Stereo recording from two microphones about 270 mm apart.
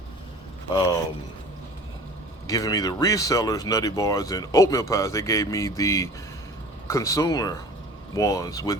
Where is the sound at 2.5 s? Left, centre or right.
Centre.